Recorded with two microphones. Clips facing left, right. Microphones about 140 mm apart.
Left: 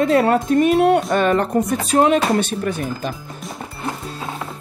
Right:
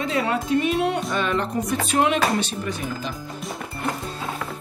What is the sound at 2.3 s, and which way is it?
Speech, 50° left (ahead or behind).